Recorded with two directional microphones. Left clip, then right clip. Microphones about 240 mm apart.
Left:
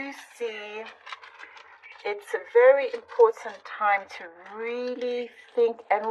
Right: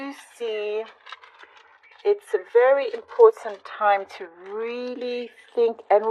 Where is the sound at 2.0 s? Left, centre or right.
Right.